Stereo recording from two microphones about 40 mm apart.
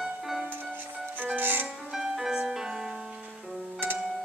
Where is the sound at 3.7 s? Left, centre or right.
Right.